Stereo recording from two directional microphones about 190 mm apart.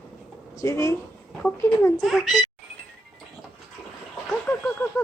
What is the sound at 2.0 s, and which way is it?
Speech, centre (ahead or behind).